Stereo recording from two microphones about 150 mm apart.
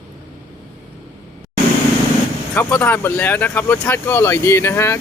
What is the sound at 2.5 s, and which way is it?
Speech, 15° left (ahead or behind).